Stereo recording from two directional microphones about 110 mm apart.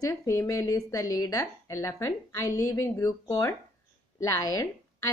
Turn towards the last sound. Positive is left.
turn(degrees=30)  # may be behind; listen again after turning